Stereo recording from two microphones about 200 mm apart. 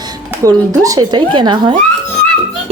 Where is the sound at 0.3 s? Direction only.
15° right (ahead or behind).